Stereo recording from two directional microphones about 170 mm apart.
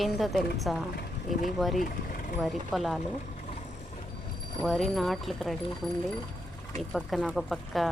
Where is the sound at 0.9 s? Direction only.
55° left (ahead or behind).